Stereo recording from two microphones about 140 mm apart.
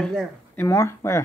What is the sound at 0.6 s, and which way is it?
Speech, 20° left (ahead or behind).